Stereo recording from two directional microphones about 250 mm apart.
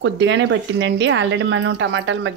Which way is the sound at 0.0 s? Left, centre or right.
Right.